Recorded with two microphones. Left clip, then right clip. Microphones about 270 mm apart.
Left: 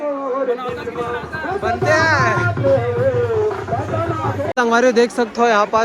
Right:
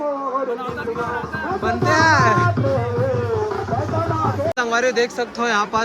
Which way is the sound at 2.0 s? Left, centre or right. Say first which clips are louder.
Right 1 dB; centre.